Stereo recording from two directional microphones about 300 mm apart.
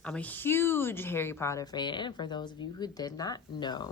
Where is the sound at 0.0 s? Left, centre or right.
Centre.